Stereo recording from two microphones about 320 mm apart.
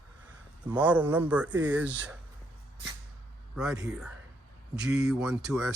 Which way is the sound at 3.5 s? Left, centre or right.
Centre.